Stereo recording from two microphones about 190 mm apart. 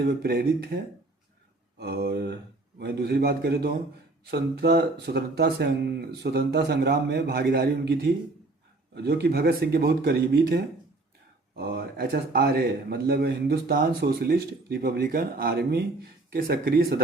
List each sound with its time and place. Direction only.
0.0 s speech: 55° right (ahead or behind)
1.8 s a man's voice: 55° right (ahead or behind)